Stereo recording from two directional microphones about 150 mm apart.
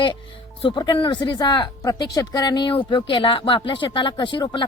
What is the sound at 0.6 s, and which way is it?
Speech, 30° left (ahead or behind).